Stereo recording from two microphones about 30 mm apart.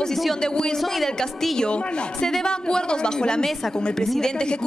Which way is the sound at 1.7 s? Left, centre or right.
Left.